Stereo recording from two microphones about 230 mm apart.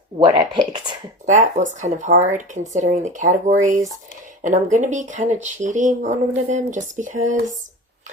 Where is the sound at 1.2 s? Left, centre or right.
Right.